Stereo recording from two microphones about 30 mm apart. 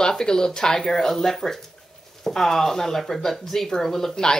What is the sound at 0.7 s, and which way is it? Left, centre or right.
Speech, centre.